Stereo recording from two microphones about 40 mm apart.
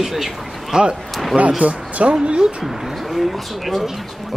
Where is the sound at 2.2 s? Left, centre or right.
Centre.